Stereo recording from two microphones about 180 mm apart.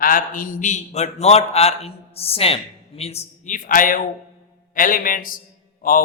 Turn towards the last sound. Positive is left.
turn(degrees=50)  # may be behind; listen again after turning